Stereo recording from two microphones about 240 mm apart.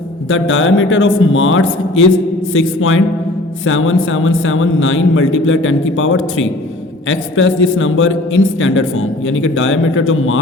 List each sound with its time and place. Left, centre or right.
0.3 s a man's voice: left